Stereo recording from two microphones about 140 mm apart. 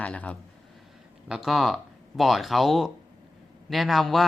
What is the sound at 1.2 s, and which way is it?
Speech, 5° right (ahead or behind).